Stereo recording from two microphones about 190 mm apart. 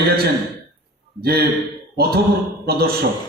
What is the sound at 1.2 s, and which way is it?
A man's voice, 55° right (ahead or behind).